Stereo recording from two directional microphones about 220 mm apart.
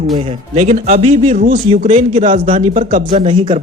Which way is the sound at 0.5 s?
30° right (ahead or behind).